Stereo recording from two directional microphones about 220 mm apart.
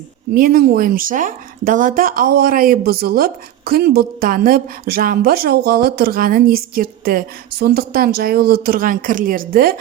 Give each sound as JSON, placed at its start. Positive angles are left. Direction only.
{"t": 0.3, "sound": "speech", "side_deg": -40}